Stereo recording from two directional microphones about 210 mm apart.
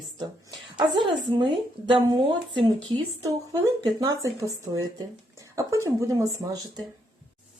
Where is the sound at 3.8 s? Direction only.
20° right (ahead or behind).